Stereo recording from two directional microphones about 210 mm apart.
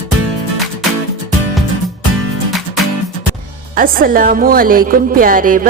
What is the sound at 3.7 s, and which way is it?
A woman's voice, 40° right (ahead or behind).